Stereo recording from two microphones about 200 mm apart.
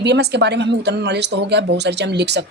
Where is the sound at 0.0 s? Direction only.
55° right (ahead or behind).